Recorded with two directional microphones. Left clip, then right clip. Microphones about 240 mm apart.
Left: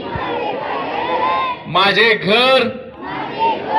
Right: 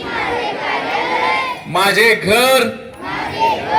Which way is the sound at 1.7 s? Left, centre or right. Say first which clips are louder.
Right 1 dB; right.